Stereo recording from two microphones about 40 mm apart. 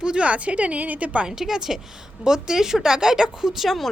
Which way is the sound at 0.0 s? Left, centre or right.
Right.